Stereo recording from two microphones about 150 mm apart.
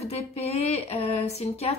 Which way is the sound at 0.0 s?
45° left (ahead or behind).